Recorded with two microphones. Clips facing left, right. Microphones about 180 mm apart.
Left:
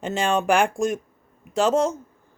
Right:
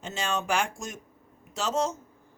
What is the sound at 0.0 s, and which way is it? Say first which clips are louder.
A woman's voice: left 9 dB; 55° left (ahead or behind).